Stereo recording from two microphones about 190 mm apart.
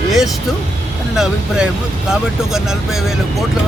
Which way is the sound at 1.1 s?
5° right (ahead or behind).